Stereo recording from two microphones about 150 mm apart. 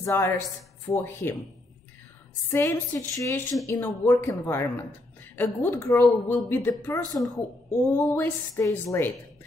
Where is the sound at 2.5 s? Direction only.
15° left (ahead or behind).